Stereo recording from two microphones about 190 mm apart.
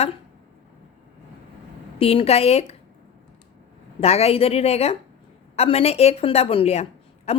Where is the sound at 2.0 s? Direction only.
30° left (ahead or behind).